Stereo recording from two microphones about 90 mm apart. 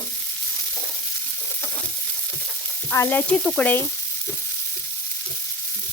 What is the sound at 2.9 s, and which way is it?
Stir, 30° left (ahead or behind).